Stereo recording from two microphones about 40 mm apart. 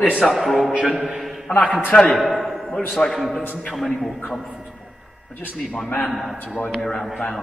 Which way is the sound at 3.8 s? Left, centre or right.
Centre.